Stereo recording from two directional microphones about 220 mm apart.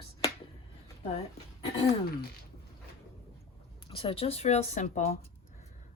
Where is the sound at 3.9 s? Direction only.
25° left (ahead or behind).